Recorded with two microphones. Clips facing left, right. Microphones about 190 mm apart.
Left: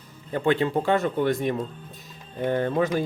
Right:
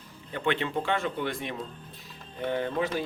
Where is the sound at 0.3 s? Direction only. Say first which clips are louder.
Left 6 dB; 40° left (ahead or behind).